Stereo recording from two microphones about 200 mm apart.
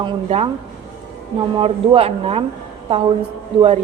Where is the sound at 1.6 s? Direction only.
30° right (ahead or behind).